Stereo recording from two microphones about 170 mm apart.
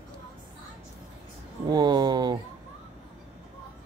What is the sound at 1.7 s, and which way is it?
Speech, 25° right (ahead or behind).